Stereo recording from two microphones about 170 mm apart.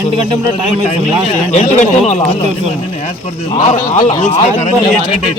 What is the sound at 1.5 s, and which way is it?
Speech, 40° left (ahead or behind).